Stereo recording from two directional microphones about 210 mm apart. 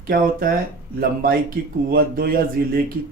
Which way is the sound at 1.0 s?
45° right (ahead or behind).